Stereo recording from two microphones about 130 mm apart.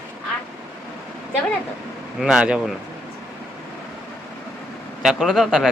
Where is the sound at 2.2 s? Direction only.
10° right (ahead or behind).